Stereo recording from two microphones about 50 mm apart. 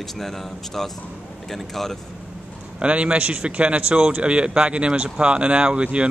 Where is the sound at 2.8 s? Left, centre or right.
Right.